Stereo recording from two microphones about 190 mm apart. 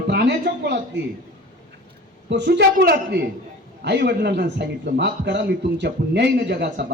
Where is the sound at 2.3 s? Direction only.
65° right (ahead or behind).